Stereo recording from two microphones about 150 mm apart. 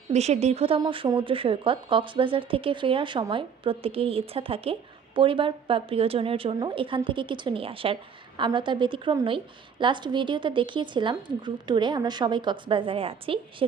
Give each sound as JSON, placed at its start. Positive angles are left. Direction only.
{"t": 0.1, "sound": "speech", "side_deg": -45}
{"t": 0.8, "sound": "speech", "side_deg": -30}